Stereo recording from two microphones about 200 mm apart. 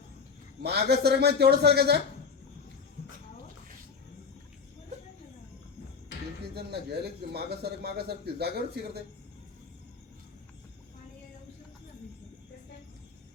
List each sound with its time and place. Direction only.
0.6 s a man's voice: 55° right (ahead or behind)
6.5 s a man's voice: 55° right (ahead or behind)